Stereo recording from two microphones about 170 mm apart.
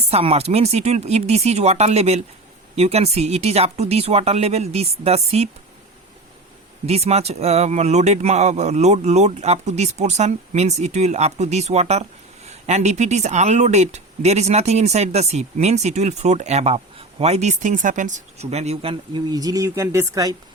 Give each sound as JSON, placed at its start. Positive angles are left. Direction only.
{"t": 0.1, "sound": "speech", "side_deg": -35}
{"t": 6.8, "sound": "speech", "side_deg": -40}